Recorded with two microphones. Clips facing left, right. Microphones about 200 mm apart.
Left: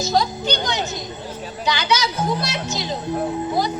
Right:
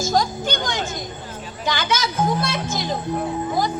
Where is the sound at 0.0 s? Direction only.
50° right (ahead or behind).